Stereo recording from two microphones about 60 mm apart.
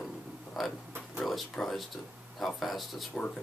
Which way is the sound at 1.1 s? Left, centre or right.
Centre.